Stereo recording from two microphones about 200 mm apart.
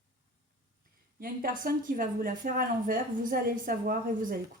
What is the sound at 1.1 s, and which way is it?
Speech, 45° right (ahead or behind).